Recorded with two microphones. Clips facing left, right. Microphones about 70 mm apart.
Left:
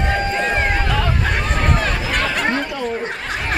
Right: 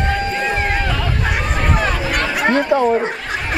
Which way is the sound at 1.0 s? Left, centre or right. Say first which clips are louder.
Even; centre.